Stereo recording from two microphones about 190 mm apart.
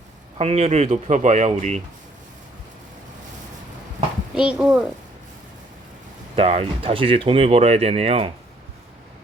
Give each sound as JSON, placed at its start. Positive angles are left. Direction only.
{"t": 0.3, "sound": "speech", "side_deg": -35}
{"t": 4.4, "sound": "a child's voice", "side_deg": -5}
{"t": 6.3, "sound": "speech", "side_deg": -30}